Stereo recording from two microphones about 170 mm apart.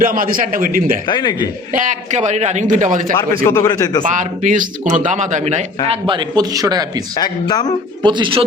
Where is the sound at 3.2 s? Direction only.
15° left (ahead or behind).